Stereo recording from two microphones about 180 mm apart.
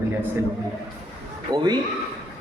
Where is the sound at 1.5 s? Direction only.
25° right (ahead or behind).